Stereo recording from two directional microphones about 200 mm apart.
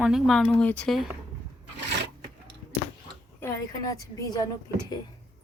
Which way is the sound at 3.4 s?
20° left (ahead or behind).